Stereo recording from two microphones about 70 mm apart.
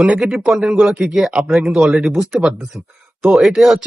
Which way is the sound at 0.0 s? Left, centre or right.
Centre.